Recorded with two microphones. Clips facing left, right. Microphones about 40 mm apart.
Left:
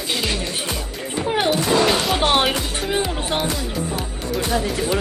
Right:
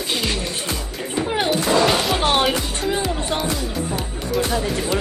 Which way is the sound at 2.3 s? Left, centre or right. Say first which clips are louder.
Even; centre.